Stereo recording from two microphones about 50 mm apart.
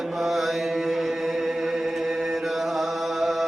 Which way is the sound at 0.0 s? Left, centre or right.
Centre.